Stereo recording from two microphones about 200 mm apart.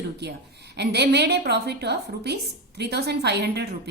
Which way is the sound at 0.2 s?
55° right (ahead or behind).